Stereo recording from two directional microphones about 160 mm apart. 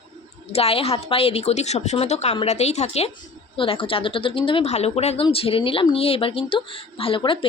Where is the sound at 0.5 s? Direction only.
40° left (ahead or behind).